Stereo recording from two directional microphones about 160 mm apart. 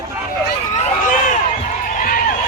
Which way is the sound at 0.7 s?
55° left (ahead or behind).